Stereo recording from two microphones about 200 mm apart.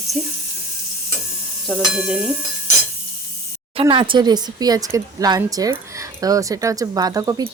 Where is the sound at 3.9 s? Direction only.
25° right (ahead or behind).